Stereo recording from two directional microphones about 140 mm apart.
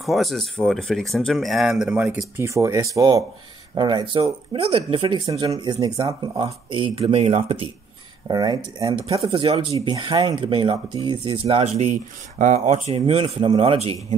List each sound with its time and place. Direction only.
0.0 s speech: centre (ahead or behind)
2.4 s speech: 20° right (ahead or behind); by 7.6 s 45° right (ahead or behind)
8.3 s speech: 30° right (ahead or behind)
9.0 s speech: 40° right (ahead or behind)